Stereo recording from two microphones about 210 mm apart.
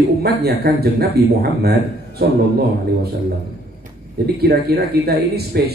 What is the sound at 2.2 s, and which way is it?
Speech, 50° right (ahead or behind).